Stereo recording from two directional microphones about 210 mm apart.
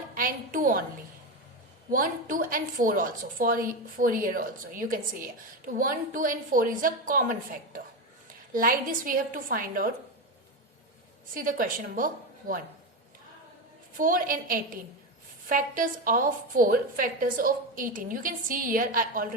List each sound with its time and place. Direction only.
0.1 s a sound: 40° right (ahead or behind)
1.9 s a woman's voice: 40° right (ahead or behind)
11.3 s a woman's voice: 40° right (ahead or behind)
13.9 s a woman's voice: 40° right (ahead or behind)